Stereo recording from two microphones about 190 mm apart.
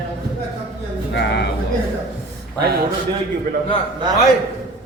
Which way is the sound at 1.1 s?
60° left (ahead or behind).